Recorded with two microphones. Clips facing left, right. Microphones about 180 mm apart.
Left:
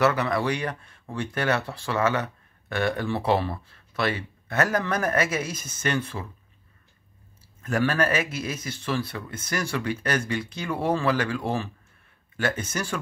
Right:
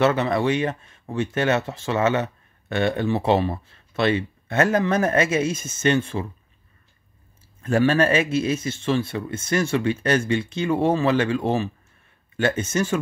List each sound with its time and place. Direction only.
0.0 s speech: 25° right (ahead or behind)
7.6 s speech: 25° right (ahead or behind)